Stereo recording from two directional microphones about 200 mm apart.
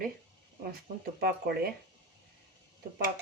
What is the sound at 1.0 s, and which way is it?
Speech, 50° right (ahead or behind).